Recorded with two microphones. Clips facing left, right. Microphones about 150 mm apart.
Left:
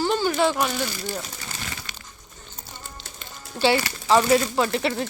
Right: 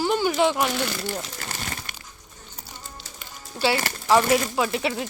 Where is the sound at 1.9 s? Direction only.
55° right (ahead or behind).